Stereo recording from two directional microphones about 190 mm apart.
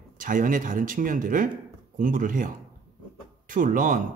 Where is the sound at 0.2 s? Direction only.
45° right (ahead or behind).